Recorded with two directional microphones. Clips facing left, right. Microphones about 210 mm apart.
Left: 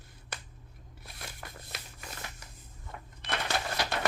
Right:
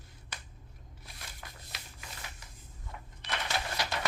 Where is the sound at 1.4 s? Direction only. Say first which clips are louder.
Left 3 dB; 55° left (ahead or behind).